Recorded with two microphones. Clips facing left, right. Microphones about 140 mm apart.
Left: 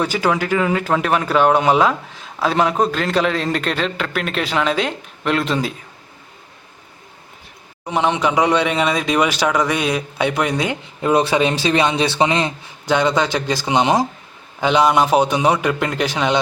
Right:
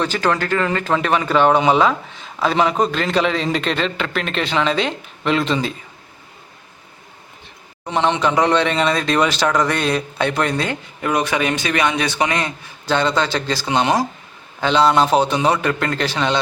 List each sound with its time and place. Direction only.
0.0 s speech: 10° left (ahead or behind)
7.9 s a man's voice: 10° left (ahead or behind)
11.1 s a man's voice: 30° left (ahead or behind); by 16.4 s 15° left (ahead or behind)